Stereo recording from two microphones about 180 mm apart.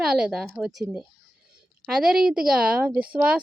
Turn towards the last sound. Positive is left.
turn(degrees=-5)  # may be behind; listen again after turning